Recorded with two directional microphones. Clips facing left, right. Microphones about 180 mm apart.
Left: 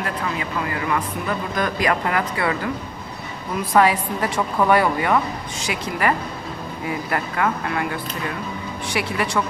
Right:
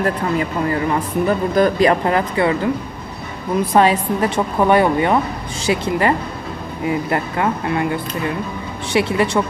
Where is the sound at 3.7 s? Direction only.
25° right (ahead or behind).